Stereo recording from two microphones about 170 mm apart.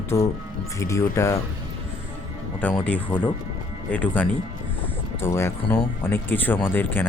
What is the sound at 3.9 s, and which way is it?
Speech, 10° left (ahead or behind).